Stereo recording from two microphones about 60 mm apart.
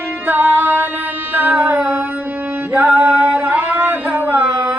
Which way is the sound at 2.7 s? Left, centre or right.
Right.